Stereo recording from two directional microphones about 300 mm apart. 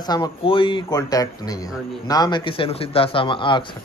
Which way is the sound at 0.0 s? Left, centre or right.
Centre.